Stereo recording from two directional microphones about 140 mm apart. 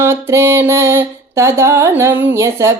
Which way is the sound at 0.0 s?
20° right (ahead or behind).